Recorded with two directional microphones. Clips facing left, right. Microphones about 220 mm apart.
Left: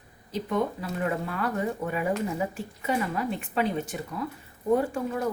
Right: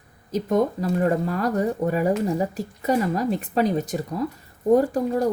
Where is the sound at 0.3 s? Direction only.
45° right (ahead or behind).